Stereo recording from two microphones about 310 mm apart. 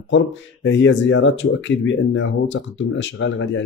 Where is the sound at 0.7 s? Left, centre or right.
Left.